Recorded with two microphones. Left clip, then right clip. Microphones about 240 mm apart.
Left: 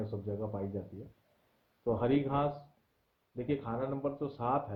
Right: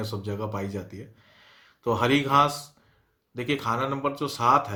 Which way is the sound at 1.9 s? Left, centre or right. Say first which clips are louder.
Right 12 dB; centre.